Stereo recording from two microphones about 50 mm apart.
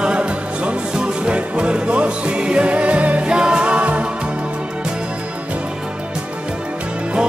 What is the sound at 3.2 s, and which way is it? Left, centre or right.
Music, centre.